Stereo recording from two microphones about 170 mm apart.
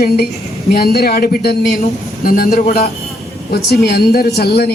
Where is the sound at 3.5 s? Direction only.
70° left (ahead or behind).